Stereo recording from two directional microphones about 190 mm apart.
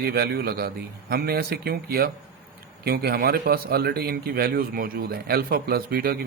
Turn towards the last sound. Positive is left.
turn(degrees=-55)  # may be behind; listen again after turning